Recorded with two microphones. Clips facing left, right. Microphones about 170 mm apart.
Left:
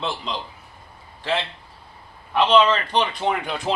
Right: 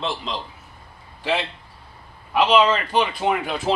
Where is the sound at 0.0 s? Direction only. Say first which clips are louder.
Right 1 dB; centre (ahead or behind).